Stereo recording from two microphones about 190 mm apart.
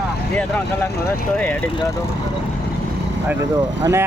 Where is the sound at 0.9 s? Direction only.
55° left (ahead or behind).